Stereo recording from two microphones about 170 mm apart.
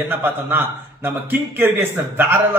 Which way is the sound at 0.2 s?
10° right (ahead or behind).